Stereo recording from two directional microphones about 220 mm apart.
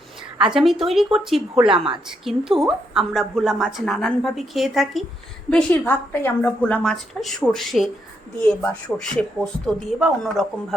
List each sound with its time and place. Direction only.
0.3 s a woman's voice: 5° right (ahead or behind)
1.7 s a woman's voice: 20° right (ahead or behind)
2.0 s a woman's voice: centre (ahead or behind)